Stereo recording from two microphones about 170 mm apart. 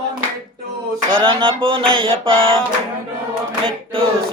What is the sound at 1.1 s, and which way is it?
Singing, 30° right (ahead or behind).